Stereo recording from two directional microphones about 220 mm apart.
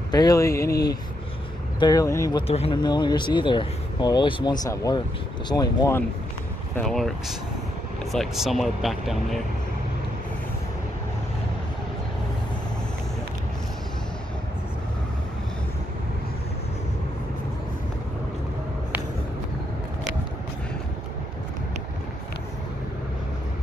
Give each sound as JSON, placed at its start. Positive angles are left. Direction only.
{"t": 0.1, "sound": "speech", "side_deg": 15}
{"t": 1.8, "sound": "speech", "side_deg": 15}
{"t": 2.4, "sound": "speech", "side_deg": 25}
{"t": 6.8, "sound": "speech", "side_deg": 0}